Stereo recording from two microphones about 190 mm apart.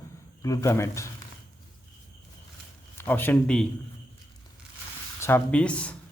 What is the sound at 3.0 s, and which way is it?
Speech, 10° left (ahead or behind).